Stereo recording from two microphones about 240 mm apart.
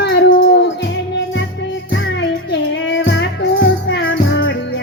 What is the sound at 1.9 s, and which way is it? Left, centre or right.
Music, left.